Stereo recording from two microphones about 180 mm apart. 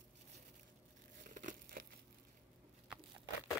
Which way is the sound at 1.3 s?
45° right (ahead or behind).